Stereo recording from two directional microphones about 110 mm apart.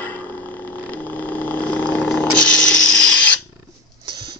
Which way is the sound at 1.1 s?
15° left (ahead or behind).